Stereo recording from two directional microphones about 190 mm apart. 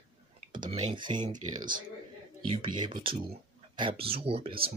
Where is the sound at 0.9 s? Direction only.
25° right (ahead or behind).